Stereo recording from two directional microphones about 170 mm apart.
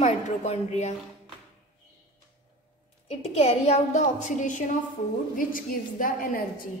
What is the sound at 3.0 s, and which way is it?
A woman's voice, 35° left (ahead or behind).